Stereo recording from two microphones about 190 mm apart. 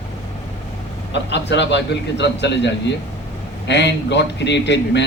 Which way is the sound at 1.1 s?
65° left (ahead or behind).